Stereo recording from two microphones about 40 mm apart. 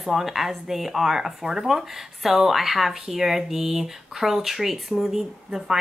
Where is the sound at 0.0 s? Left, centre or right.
Centre.